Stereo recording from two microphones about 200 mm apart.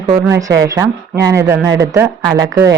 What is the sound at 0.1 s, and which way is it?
A woman's voice, 15° right (ahead or behind).